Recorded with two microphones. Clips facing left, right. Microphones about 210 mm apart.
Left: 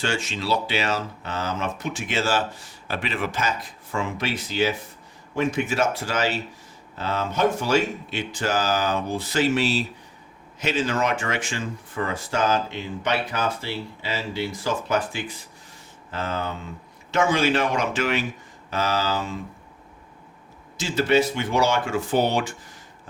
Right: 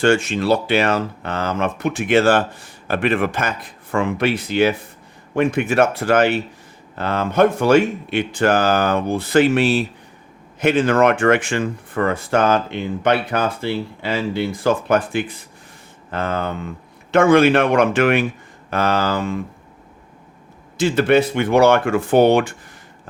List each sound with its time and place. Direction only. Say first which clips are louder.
0.0 s speech: right 11 dB; 55° right (ahead or behind)
20.7 s speech: right 6 dB; 55° right (ahead or behind)